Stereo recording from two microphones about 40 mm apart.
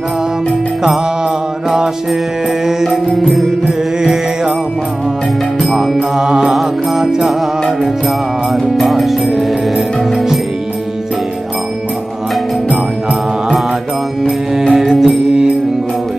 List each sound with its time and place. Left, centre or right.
2.6 s music: centre
5.6 s music: centre
6.1 s music: centre
6.5 s mantra: centre
8.7 s music: centre
14.7 s music: centre